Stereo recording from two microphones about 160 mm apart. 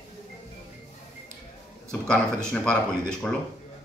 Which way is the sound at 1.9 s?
5° left (ahead or behind).